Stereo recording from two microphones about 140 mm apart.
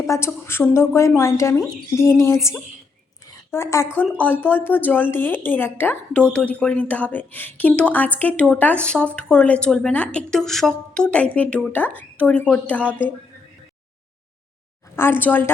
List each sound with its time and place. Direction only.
0.0 s a woman's voice: 20° left (ahead or behind)
14.9 s a woman's voice: 15° left (ahead or behind)